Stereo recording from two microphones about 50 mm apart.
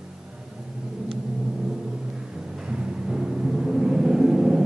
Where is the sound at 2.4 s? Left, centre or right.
Centre.